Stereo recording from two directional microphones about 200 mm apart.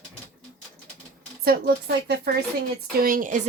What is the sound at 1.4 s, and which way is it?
A woman's voice, 55° right (ahead or behind).